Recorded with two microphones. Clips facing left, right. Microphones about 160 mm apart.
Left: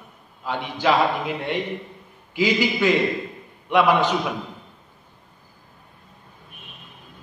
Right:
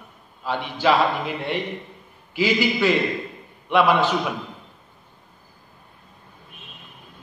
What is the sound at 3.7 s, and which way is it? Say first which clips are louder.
Speech: even; 15° left (ahead or behind).